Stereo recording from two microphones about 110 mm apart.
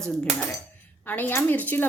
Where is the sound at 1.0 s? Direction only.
15° left (ahead or behind).